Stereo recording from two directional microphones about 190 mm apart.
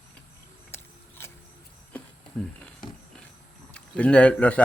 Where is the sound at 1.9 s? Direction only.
5° left (ahead or behind).